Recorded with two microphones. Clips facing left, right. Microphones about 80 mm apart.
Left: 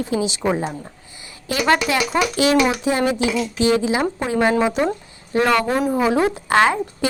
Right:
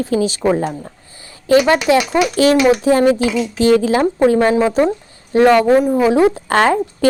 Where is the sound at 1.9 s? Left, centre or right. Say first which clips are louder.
Right 8 dB; right.